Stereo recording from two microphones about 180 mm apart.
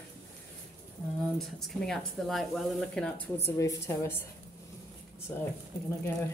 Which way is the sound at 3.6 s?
15° left (ahead or behind).